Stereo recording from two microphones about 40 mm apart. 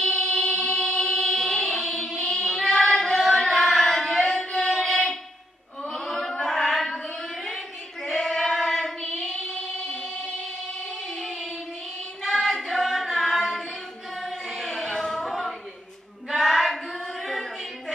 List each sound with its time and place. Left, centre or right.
0.3 s music: left
0.9 s music: centre
2.2 s child singing: centre
3.3 s carnatic music: centre
5.9 s child singing: centre
9.6 s singing: left
11.1 s a sound: centre
12.2 s child singing: centre
14.1 s choir: centre
15.0 s a sound: centre
16.3 s child singing: centre